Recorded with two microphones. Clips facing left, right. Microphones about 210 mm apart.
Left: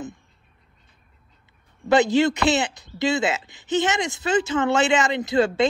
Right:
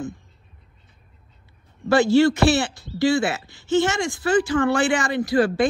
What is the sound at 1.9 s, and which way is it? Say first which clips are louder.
Speech: right 2 dB; 20° left (ahead or behind).